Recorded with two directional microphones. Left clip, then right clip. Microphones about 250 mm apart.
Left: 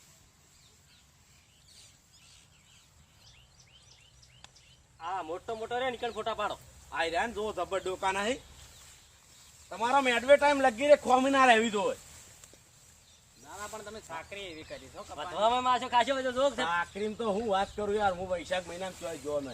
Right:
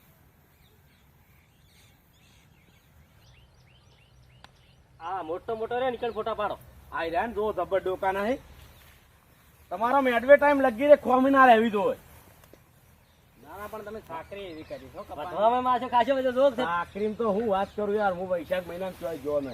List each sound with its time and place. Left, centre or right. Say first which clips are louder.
4.9 s speech: right 3 dB; centre
9.6 s a man's voice: right 3 dB; left
13.4 s speech: right 3 dB; centre
16.6 s speech: right 3 dB; centre
17.2 s speech: right 3 dB; centre